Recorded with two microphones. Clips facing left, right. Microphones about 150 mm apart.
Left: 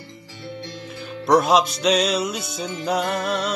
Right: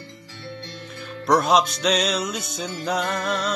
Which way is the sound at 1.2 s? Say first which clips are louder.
Left 2 dB; centre (ahead or behind).